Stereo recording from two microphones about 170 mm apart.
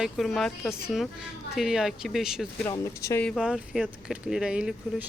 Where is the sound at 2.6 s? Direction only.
20° left (ahead or behind).